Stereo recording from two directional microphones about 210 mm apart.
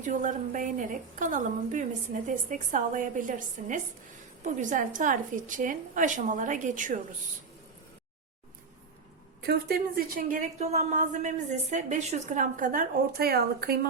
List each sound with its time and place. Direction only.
0.0 s a woman's voice: 40° right (ahead or behind)
9.5 s a woman's voice: 45° right (ahead or behind)